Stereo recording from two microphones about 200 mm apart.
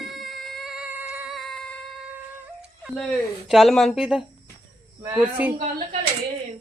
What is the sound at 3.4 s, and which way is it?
Speech, centre (ahead or behind).